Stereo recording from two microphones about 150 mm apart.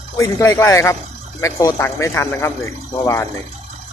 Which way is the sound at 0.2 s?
20° left (ahead or behind).